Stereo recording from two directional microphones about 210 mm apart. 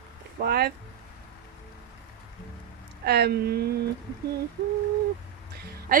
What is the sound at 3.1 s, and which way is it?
Speech, 50° right (ahead or behind).